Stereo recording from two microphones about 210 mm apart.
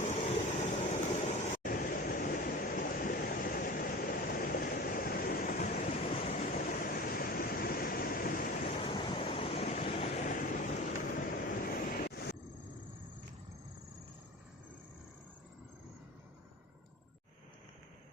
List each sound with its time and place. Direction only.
0.0 s vehicle: 30° left (ahead or behind)
8.6 s waves: 25° left (ahead or behind); by 12.4 s 50° left (ahead or behind)